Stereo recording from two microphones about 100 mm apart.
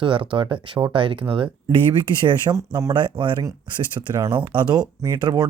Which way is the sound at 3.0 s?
50° right (ahead or behind).